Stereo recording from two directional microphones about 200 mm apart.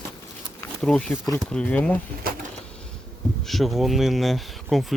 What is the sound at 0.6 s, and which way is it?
Speech, 5° left (ahead or behind).